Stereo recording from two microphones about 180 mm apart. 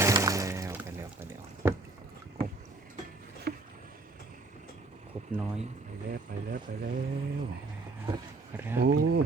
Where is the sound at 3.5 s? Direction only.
65° right (ahead or behind).